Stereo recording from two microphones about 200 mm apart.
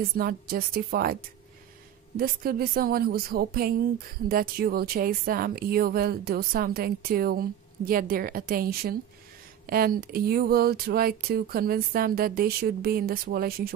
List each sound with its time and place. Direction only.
0.2 s speech: 45° right (ahead or behind)
2.1 s speech: 45° right (ahead or behind)